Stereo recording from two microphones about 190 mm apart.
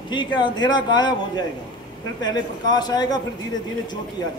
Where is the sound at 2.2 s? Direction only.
20° left (ahead or behind).